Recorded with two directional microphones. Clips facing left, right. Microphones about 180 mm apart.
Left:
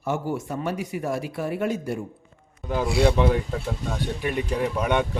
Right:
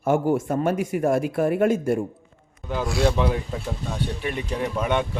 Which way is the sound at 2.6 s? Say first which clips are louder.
Left 1 dB; centre (ahead or behind).